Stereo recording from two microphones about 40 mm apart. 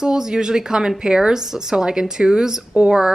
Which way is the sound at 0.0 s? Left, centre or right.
Centre.